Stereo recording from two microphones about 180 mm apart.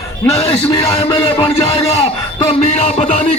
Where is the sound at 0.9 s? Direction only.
30° left (ahead or behind).